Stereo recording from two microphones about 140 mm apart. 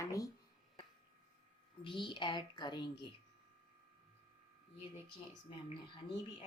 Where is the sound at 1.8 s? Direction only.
35° left (ahead or behind).